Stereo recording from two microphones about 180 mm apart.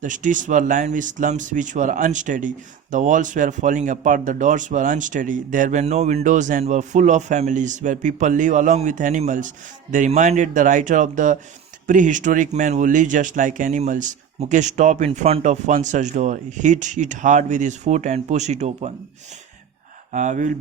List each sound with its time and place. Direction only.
0.0 s speech: 45° right (ahead or behind)
20.1 s speech: 45° right (ahead or behind)